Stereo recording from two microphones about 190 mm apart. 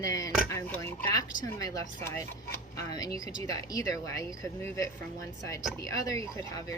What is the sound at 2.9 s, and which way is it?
Speech, 20° left (ahead or behind).